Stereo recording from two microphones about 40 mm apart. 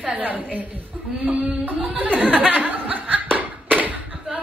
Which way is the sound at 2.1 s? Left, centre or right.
Right.